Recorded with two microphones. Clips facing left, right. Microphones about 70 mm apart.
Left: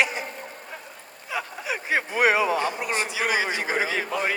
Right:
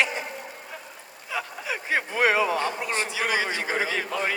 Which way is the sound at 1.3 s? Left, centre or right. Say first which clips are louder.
Left 1 dB; centre.